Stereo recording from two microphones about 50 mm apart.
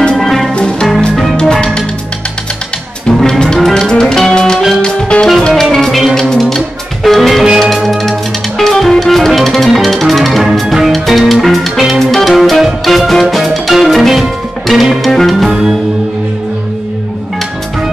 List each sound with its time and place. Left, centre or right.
0.1 s music: centre
0.6 s music: centre
0.8 s music: centre
1.3 s music: centre
3.3 s music: centre
3.5 s music: centre
3.8 s music: centre
15.5 s music: centre